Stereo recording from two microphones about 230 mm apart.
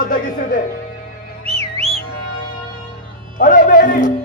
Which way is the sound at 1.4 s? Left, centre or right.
Right.